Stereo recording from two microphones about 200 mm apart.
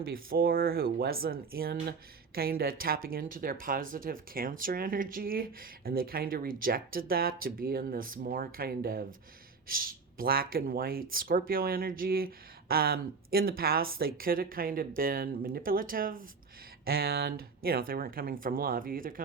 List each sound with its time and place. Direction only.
0.0 s speech: 45° right (ahead or behind)